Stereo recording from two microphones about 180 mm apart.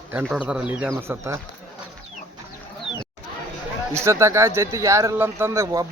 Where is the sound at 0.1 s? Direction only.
5° right (ahead or behind).